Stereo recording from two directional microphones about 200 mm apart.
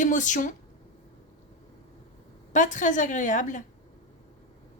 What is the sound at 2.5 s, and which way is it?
Speech, 40° left (ahead or behind).